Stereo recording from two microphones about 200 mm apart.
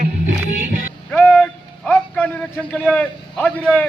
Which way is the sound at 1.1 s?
5° left (ahead or behind).